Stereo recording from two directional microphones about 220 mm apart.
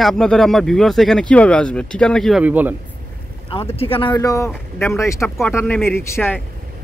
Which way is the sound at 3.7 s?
25° left (ahead or behind).